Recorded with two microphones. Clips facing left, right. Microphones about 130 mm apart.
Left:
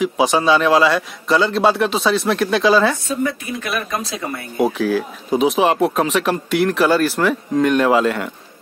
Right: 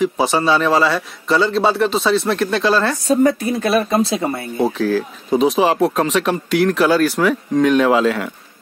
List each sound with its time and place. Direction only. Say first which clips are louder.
0.0 s speech: even; centre (ahead or behind)
3.1 s speech: right 7 dB; 40° right (ahead or behind)
4.6 s speech: left 1 dB; 5° left (ahead or behind)